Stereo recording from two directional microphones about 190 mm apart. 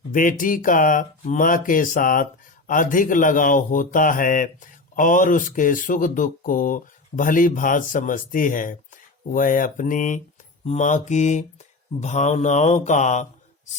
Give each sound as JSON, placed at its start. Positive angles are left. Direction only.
{"t": 0.1, "sound": "speech", "side_deg": 45}